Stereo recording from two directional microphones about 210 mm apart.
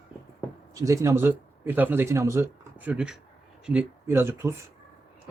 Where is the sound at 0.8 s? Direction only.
15° right (ahead or behind).